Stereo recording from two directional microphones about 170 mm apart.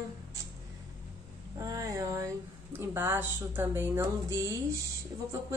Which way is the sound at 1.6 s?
20° right (ahead or behind).